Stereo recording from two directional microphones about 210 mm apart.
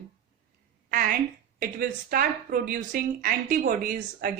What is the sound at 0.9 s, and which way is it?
A woman's voice, 45° right (ahead or behind).